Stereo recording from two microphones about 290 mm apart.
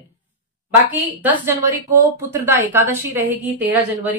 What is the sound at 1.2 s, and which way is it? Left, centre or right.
A woman's voice, centre.